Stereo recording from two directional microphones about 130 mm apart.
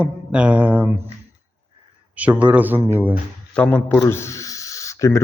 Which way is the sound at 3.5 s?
15° left (ahead or behind).